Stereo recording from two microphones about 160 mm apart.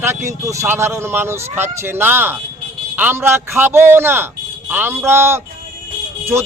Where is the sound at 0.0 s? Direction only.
15° right (ahead or behind).